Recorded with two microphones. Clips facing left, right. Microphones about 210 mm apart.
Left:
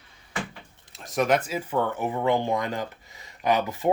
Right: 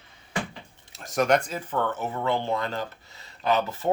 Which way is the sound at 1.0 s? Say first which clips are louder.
Right 1 dB; centre (ahead or behind).